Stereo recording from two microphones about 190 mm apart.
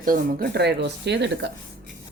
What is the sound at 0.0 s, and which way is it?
Speech, 50° right (ahead or behind).